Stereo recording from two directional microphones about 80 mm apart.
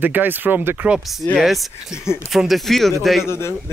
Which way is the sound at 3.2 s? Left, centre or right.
Left.